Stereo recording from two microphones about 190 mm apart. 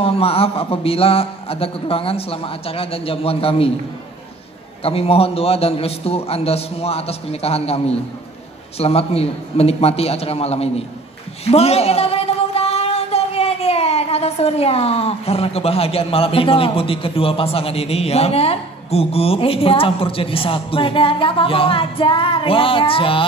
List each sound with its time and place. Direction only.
0.0 s a woman's voice: 30° left (ahead or behind)
4.8 s a woman's voice: 30° left (ahead or behind)